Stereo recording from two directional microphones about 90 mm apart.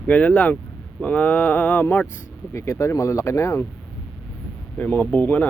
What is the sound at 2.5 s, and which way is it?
Speech, 35° left (ahead or behind).